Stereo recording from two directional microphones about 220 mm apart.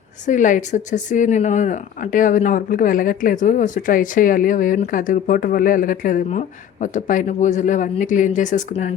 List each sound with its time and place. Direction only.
0.3 s speech: 35° left (ahead or behind)